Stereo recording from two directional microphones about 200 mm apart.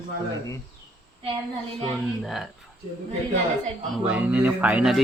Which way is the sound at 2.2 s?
Centre (ahead or behind).